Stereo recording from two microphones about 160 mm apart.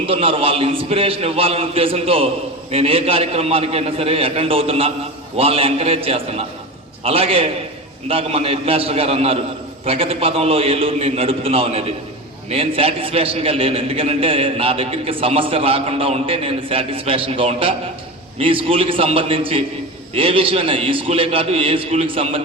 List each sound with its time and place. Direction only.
0.0 s a man's voice: 35° right (ahead or behind)